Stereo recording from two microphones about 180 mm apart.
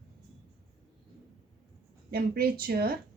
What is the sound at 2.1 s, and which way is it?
Speech, 55° right (ahead or behind).